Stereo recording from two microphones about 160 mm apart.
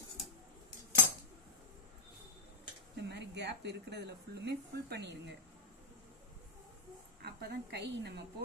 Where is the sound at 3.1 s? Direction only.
90° right.